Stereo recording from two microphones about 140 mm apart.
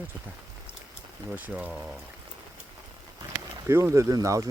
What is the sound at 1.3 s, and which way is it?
Speech, 10° right (ahead or behind).